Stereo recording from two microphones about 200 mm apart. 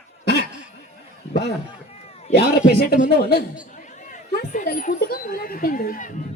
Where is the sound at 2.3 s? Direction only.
55° left (ahead or behind).